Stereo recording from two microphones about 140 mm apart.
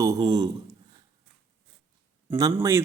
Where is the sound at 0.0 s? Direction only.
30° right (ahead or behind).